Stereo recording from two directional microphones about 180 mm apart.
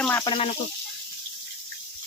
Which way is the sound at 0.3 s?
30° left (ahead or behind).